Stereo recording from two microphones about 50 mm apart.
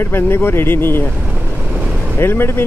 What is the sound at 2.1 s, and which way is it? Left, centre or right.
Speech, left.